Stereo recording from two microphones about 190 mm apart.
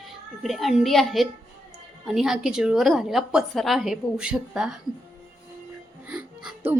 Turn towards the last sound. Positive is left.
turn(degrees=-5)  # may be behind; listen again after turning